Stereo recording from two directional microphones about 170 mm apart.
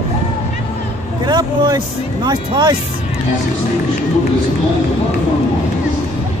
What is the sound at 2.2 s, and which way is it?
Speech, 25° right (ahead or behind).